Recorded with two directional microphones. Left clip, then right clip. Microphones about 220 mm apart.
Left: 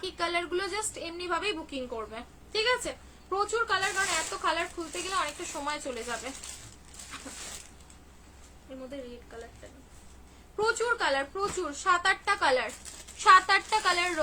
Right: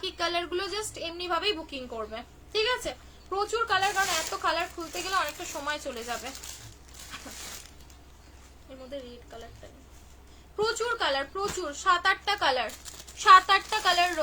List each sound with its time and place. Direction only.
0.0 s a woman's voice: 15° left (ahead or behind)
10.6 s a woman's voice: 15° left (ahead or behind)